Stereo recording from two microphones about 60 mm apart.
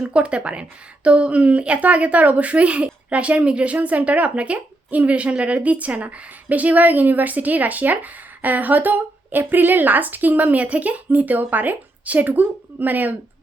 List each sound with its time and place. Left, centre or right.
0.1 s a woman's voice: centre